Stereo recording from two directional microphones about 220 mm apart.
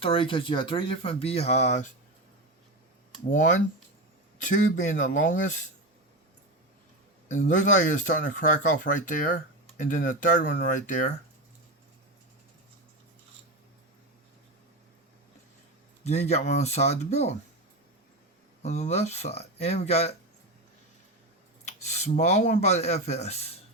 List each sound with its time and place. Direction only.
0.0 s speech: 25° left (ahead or behind)
3.2 s speech: 35° left (ahead or behind)
7.3 s speech: 35° left (ahead or behind)
16.0 s speech: 30° left (ahead or behind)
18.6 s speech: 30° left (ahead or behind)
21.6 s speech: 30° left (ahead or behind)